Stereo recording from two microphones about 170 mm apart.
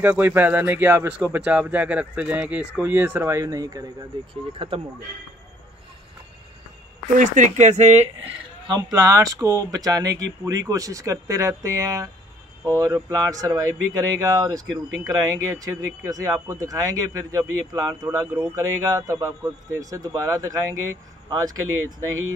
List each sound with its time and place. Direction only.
0.0 s speech: 10° right (ahead or behind)
4.3 s speech: 30° right (ahead or behind)
7.2 s speech: 50° right (ahead or behind)
8.9 s a man's voice: 20° right (ahead or behind)